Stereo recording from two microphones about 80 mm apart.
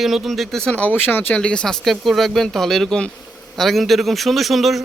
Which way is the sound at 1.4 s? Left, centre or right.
Centre.